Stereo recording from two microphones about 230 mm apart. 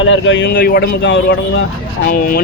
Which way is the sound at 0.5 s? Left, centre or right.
Left.